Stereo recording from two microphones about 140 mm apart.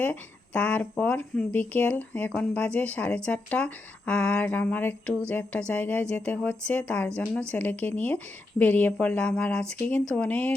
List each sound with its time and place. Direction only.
0.0 s speech: 10° left (ahead or behind)